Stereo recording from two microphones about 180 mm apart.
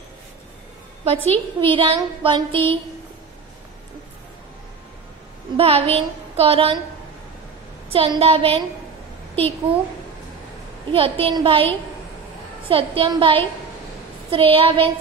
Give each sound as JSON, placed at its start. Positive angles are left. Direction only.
{"t": 1.6, "sound": "a sound", "side_deg": -30}
{"t": 5.6, "sound": "a woman's voice", "side_deg": -35}
{"t": 7.9, "sound": "a woman's voice", "side_deg": -30}
{"t": 10.9, "sound": "a woman's voice", "side_deg": -30}
{"t": 12.6, "sound": "a sound", "side_deg": -30}
{"t": 14.3, "sound": "a woman's voice", "side_deg": -30}